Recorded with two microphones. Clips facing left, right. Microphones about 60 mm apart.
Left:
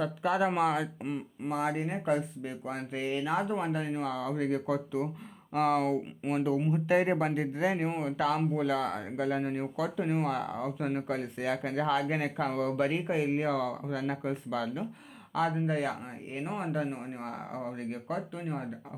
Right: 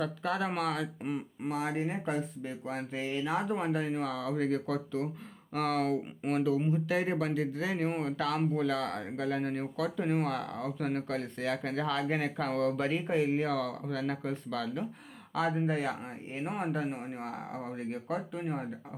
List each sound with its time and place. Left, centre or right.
0.0 s speech: centre
1.0 s speech: centre
6.7 s speech: left
7.9 s speech: centre
15.3 s speech: centre